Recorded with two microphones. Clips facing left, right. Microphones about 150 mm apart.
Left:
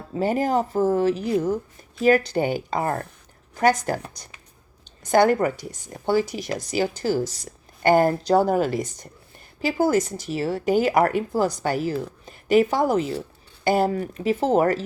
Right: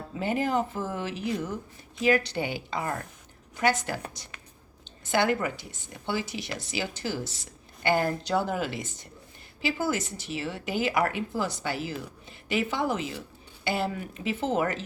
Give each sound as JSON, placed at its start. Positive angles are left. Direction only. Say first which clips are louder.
{"t": 0.1, "sound": "speech", "louder": "left 6 dB", "side_deg": 40}